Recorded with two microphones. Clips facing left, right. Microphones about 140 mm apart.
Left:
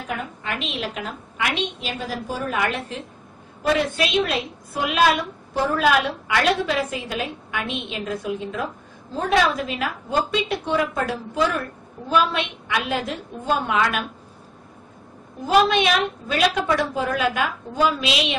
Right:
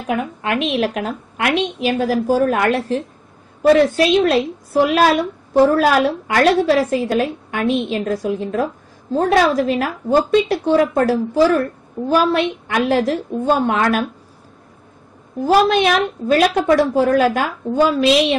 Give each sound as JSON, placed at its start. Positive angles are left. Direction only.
{"t": 0.7, "sound": "a woman's voice", "side_deg": -50}
{"t": 1.6, "sound": "a woman's voice", "side_deg": -40}
{"t": 3.9, "sound": "a woman's voice", "side_deg": -35}
{"t": 15.4, "sound": "a woman's voice", "side_deg": -45}